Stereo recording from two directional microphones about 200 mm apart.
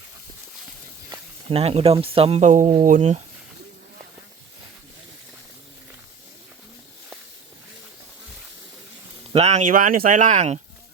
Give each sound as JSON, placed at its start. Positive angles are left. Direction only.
{"t": 1.1, "sound": "speech", "side_deg": -30}
{"t": 9.3, "sound": "speech", "side_deg": -35}